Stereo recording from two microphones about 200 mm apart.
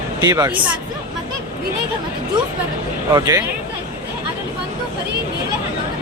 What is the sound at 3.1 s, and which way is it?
Speech, 15° right (ahead or behind).